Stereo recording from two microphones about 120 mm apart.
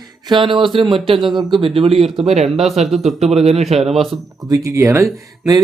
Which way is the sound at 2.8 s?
Centre (ahead or behind).